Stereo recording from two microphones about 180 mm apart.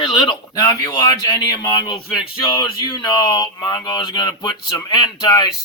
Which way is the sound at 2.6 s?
25° left (ahead or behind).